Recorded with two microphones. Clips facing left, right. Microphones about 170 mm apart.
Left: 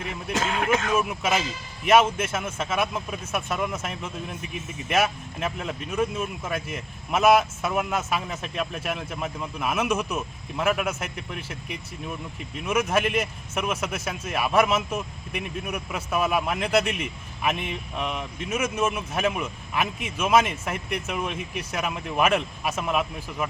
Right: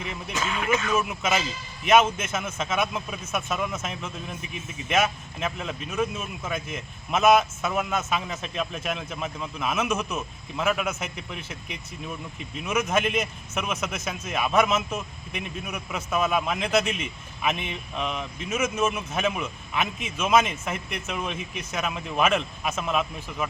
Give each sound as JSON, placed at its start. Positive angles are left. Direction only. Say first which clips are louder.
{"t": 0.4, "sound": "speech", "louder": "left 1 dB", "side_deg": 70}
{"t": 1.2, "sound": "speech", "louder": "left 1 dB", "side_deg": 10}